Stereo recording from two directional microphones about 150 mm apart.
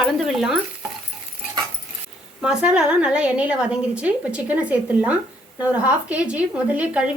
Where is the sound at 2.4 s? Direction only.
5° right (ahead or behind).